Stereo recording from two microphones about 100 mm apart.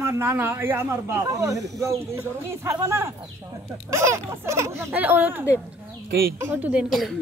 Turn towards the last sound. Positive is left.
turn(degrees=0)  # may be behind; listen again after turning